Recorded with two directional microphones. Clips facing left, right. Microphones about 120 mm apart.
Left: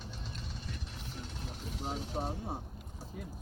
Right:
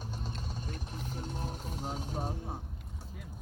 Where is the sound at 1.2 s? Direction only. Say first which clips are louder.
Right 4 dB; 45° right (ahead or behind).